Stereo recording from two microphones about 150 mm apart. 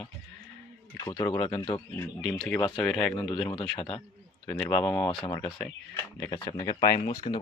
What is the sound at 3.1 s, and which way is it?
Speech, 30° left (ahead or behind).